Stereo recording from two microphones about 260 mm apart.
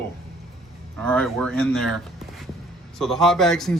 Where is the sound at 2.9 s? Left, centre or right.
Centre.